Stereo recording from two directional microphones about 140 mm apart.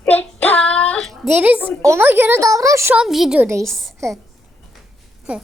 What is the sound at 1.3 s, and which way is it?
A woman's voice, 10° right (ahead or behind).